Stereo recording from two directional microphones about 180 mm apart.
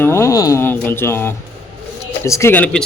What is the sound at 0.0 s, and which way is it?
A man's voice, 15° left (ahead or behind).